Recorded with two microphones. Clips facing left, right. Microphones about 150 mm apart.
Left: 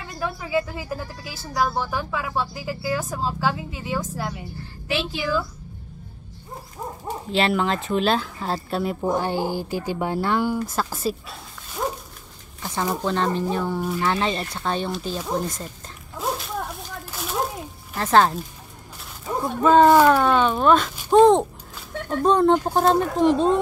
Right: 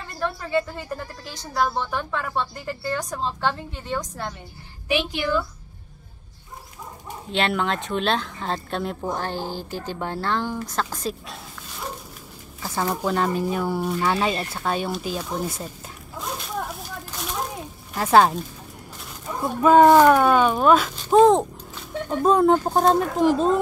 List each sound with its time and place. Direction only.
0.0 s a woman's voice: 5° left (ahead or behind)
4.8 s a woman's voice: 15° right (ahead or behind)
7.2 s speech: centre (ahead or behind)
13.0 s speech: 5° right (ahead or behind)
16.2 s a sound: centre (ahead or behind)
17.9 s speech: 10° right (ahead or behind)
19.4 s speech: 10° right (ahead or behind)
21.1 s a sound: centre (ahead or behind)
22.2 s a woman's voice: 5° right (ahead or behind)